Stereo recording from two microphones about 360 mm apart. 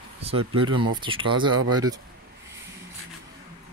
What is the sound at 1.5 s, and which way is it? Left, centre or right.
Speech, right.